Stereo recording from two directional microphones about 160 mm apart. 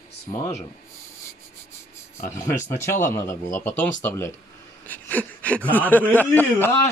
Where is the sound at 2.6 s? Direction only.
15° left (ahead or behind).